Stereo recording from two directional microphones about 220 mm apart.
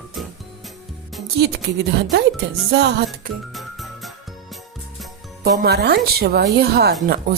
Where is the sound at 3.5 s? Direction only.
Centre (ahead or behind).